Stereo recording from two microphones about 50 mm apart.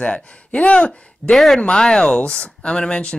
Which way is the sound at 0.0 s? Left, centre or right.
Left.